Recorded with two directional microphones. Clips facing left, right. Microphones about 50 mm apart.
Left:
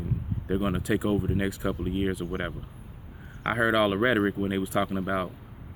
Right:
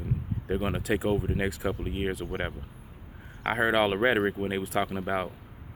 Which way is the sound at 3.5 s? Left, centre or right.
Right.